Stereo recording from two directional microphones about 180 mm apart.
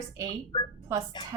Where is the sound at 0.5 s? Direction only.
30° left (ahead or behind).